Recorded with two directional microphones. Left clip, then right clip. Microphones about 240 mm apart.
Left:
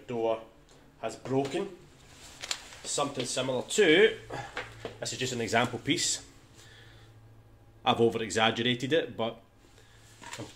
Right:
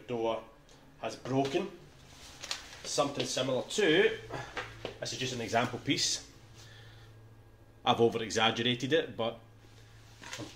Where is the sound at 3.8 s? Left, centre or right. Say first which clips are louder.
Left 5 dB; left.